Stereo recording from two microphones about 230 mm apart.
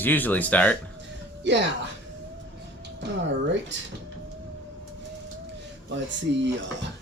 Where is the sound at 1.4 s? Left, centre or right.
Right.